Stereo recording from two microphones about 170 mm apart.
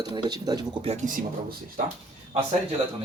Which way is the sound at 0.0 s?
25° right (ahead or behind).